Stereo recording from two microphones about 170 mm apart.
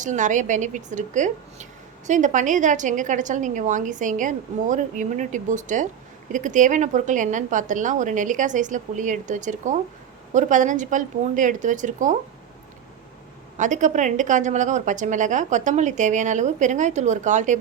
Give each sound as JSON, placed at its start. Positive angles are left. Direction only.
{"t": 0.0, "sound": "a woman's voice", "side_deg": -45}
{"t": 13.6, "sound": "a woman's voice", "side_deg": -45}